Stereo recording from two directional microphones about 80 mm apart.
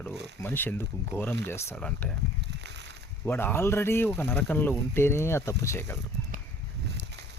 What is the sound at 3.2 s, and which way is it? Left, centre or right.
Speech, left.